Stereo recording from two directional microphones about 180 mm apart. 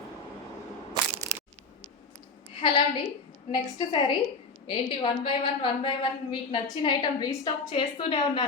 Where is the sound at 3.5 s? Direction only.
25° left (ahead or behind).